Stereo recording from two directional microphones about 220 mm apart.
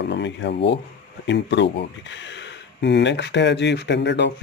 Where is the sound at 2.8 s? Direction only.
50° left (ahead or behind).